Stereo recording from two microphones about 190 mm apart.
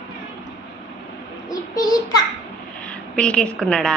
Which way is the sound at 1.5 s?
20° left (ahead or behind).